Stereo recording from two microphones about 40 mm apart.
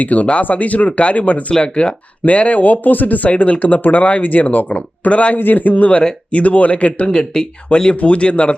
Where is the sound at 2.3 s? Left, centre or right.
Left.